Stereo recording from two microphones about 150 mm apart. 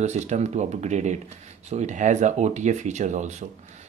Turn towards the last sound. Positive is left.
turn(degrees=-50)  # may be behind; listen again after turning